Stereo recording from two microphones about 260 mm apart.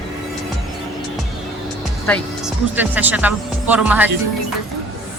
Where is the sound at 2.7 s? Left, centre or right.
Centre.